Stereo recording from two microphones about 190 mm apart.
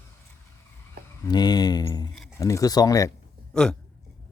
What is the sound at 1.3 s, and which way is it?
Speech, 20° left (ahead or behind).